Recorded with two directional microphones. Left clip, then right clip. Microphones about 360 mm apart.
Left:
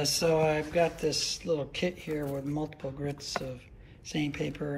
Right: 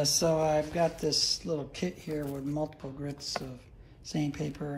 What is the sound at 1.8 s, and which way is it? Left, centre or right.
Speech, right.